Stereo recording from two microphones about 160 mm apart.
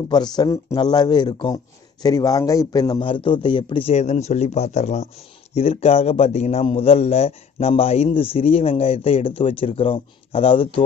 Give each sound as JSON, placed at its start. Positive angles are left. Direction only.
{"t": 0.1, "sound": "a man's voice", "side_deg": 25}